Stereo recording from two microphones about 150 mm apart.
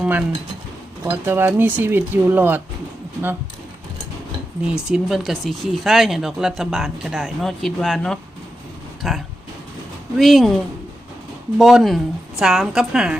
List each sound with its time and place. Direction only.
0.0 s speech: 10° right (ahead or behind)
4.6 s speech: 5° right (ahead or behind)
11.5 s speech: centre (ahead or behind)